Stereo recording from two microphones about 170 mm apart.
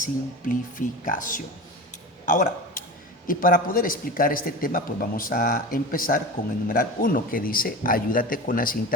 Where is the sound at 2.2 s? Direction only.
55° left (ahead or behind).